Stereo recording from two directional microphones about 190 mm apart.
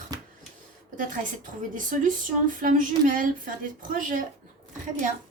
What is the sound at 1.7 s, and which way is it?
A woman's voice, 45° right (ahead or behind).